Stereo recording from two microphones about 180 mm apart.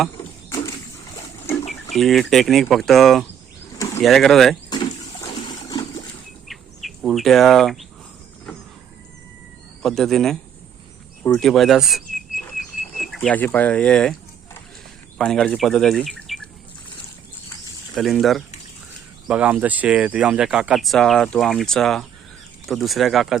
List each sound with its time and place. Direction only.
1.9 s speech: centre (ahead or behind)
3.8 s pigeon: 15° left (ahead or behind)
4.0 s speech: centre (ahead or behind)
4.7 s water: 25° left (ahead or behind)
6.5 s bird: centre (ahead or behind)
9.8 s speech: centre (ahead or behind)
11.3 s speech: centre (ahead or behind)
12.4 s bird: centre (ahead or behind)
15.2 s speech: 5° left (ahead or behind)
17.9 s speech: centre (ahead or behind)